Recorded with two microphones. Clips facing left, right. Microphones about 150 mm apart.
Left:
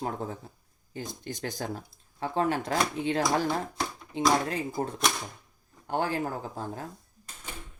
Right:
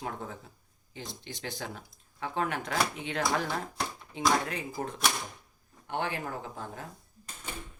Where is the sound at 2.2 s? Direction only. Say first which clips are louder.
Left 5 dB; 30° left (ahead or behind).